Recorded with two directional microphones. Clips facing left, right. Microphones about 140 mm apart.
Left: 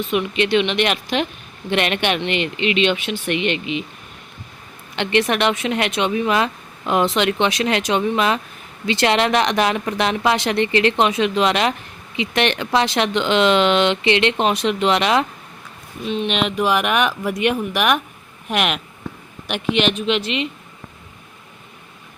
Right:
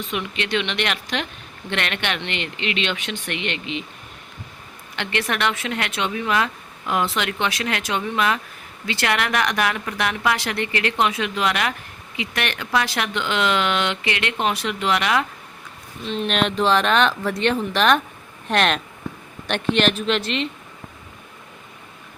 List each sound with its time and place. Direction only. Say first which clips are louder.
0.1 s speech: left 7 dB; 20° left (ahead or behind)
4.9 s speech: left 6 dB; 20° left (ahead or behind)
16.0 s speech: left 1 dB; centre (ahead or behind)